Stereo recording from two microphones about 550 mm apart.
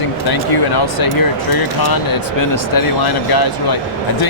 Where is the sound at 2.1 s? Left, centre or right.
Left.